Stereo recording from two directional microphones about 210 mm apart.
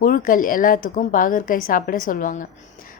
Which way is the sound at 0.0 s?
40° left (ahead or behind).